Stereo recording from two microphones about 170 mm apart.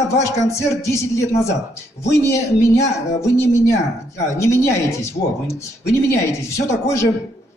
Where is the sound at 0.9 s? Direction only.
15° left (ahead or behind).